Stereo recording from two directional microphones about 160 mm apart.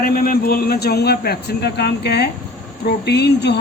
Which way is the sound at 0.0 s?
65° left (ahead or behind).